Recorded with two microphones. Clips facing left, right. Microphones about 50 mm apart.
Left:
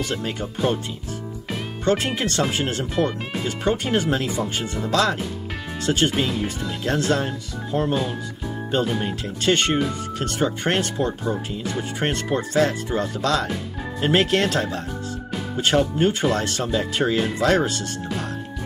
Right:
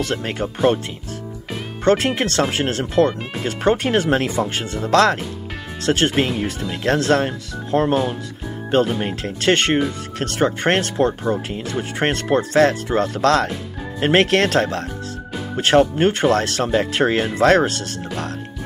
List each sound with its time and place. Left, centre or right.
0.0 s speech: right
1.9 s speech: right